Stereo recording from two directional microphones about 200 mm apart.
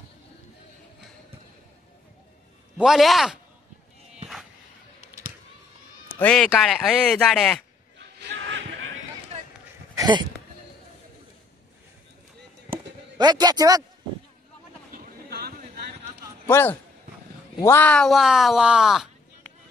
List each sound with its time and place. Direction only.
2.8 s speech: centre (ahead or behind)
6.1 s speech: 5° left (ahead or behind)
8.0 s a sound: 60° right (ahead or behind)
9.3 s run: 30° right (ahead or behind)
9.9 s sheep: 20° right (ahead or behind)
12.7 s chop: 20° right (ahead or behind)
14.9 s vehicle: 50° right (ahead or behind)
16.4 s a man's voice: 10° left (ahead or behind)